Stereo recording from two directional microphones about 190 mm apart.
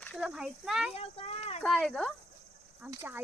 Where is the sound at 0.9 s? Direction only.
35° left (ahead or behind).